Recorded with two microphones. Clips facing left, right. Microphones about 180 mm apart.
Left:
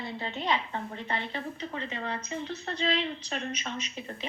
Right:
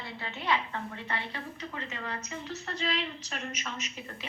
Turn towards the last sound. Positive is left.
turn(degrees=25)  # may be behind; listen again after turning